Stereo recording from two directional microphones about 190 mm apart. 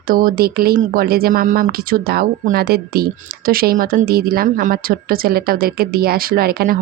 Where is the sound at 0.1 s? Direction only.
50° right (ahead or behind).